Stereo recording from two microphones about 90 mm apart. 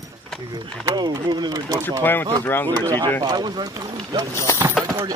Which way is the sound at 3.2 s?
60° right (ahead or behind).